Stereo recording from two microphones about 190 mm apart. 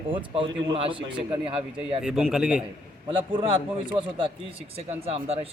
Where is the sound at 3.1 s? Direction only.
25° right (ahead or behind).